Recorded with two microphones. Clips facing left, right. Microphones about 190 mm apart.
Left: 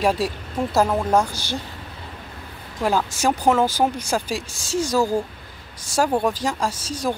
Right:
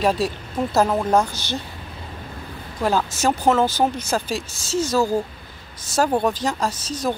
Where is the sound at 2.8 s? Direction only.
10° left (ahead or behind).